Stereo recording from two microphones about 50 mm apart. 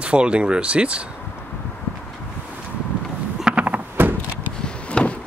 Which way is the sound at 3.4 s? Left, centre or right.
Right.